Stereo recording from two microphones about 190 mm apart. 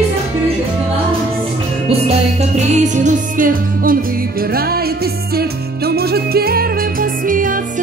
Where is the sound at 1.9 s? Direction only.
35° right (ahead or behind).